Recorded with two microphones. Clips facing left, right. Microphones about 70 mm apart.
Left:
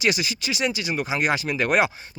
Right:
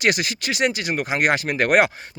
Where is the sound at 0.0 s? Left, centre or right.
Right.